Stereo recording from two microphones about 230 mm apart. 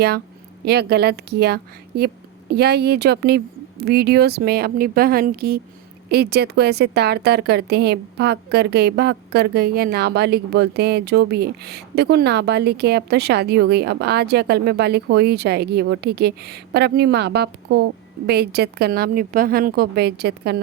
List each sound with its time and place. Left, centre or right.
0.6 s a woman's voice: right